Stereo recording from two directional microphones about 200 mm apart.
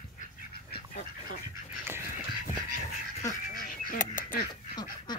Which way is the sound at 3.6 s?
45° left (ahead or behind).